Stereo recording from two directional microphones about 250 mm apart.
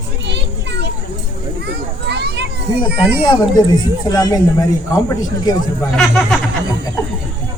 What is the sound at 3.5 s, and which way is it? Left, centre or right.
A woman's voice, centre.